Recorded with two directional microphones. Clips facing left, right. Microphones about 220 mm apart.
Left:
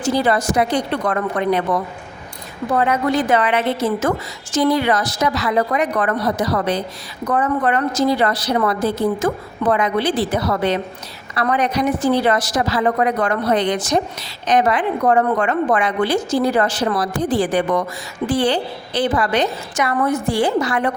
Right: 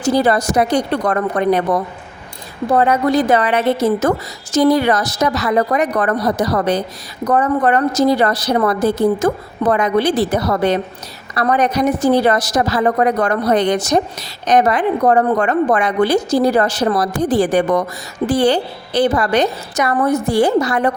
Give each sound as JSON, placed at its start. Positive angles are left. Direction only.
{"t": 0.0, "sound": "a woman's voice", "side_deg": -40}